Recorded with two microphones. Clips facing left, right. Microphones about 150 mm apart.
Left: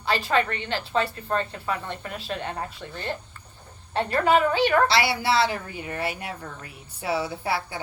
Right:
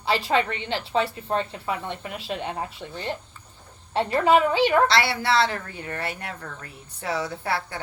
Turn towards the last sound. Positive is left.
turn(degrees=5)  # may be behind; listen again after turning